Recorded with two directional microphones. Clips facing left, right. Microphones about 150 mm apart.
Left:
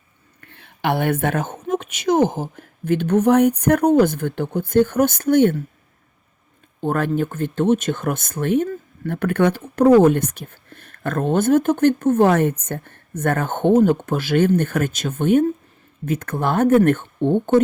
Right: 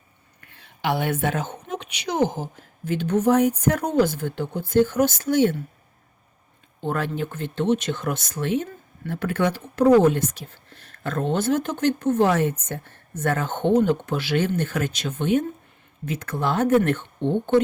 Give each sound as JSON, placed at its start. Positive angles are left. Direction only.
{"t": 0.5, "sound": "a woman's voice", "side_deg": 55}
{"t": 6.8, "sound": "speech", "side_deg": 50}